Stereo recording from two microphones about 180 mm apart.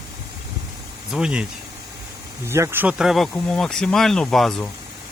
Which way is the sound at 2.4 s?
15° right (ahead or behind).